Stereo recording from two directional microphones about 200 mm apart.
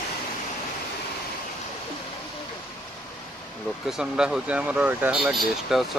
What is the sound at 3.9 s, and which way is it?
Speech, 5° right (ahead or behind).